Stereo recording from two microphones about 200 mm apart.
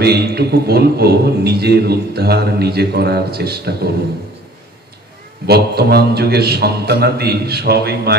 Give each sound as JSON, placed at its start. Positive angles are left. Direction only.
{"t": 0.0, "sound": "a man's voice", "side_deg": -55}
{"t": 5.5, "sound": "a man's voice", "side_deg": -50}